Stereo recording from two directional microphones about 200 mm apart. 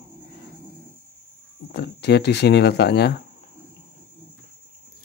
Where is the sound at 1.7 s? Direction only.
55° left (ahead or behind).